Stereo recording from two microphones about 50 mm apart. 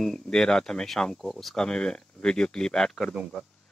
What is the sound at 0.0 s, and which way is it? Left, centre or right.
Speech, centre.